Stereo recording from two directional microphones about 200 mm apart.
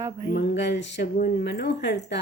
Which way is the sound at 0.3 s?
60° left (ahead or behind).